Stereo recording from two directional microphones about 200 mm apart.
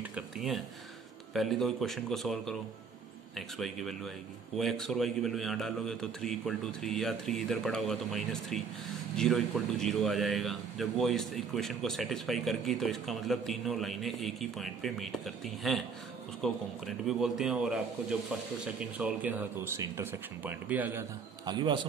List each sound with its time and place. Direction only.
0.1 s a man's voice: centre (ahead or behind)
18.8 s speech: 5° right (ahead or behind)
21.5 s a man's voice: 25° right (ahead or behind)